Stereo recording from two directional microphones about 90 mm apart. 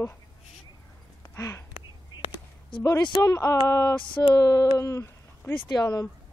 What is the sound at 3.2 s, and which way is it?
Speech, 30° left (ahead or behind).